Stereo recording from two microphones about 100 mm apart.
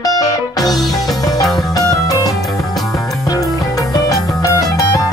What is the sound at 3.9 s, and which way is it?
Music, 40° left (ahead or behind).